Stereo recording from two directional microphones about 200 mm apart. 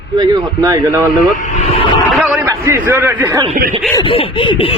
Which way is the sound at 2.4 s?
15° right (ahead or behind).